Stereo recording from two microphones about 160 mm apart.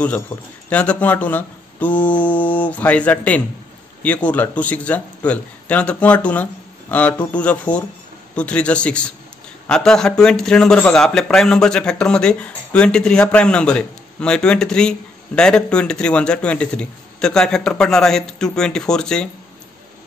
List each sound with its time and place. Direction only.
0.3 s a man's voice: 10° left (ahead or behind)